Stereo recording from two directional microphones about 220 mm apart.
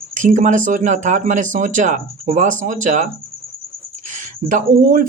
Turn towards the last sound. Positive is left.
turn(degrees=-40)  # may be behind; listen again after turning